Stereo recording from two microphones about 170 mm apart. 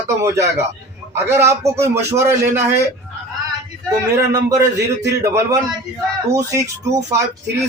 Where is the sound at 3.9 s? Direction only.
20° right (ahead or behind).